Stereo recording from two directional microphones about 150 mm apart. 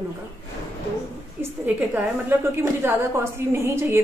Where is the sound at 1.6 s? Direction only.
10° right (ahead or behind).